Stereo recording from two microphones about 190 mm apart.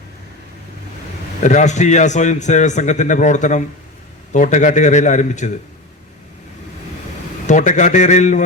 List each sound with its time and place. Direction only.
1.4 s a man's voice: 40° left (ahead or behind)
7.4 s a man's voice: 40° left (ahead or behind)